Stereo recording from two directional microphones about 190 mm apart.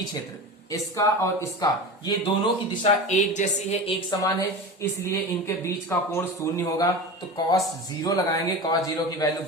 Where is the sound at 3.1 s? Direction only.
40° left (ahead or behind).